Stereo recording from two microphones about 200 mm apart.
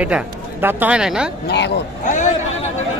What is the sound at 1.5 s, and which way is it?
Speech, 55° left (ahead or behind).